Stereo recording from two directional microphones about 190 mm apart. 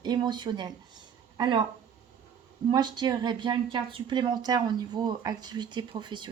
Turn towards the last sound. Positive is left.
turn(degrees=-25)  # may be behind; listen again after turning